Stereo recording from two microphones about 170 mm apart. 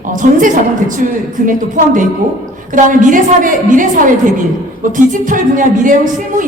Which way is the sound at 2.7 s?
50° right (ahead or behind).